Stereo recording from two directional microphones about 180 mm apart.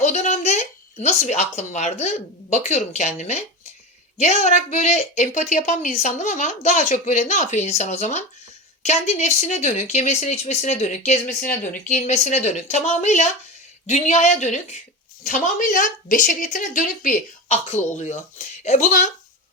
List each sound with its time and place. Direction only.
0.0 s a woman's voice: 40° left (ahead or behind)